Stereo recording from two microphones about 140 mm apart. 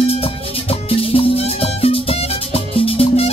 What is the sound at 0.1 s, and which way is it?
Music, 45° left (ahead or behind).